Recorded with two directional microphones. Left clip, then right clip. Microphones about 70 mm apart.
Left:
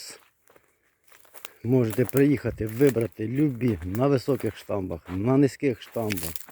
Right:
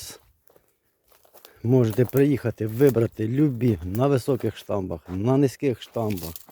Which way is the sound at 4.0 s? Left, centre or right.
Right.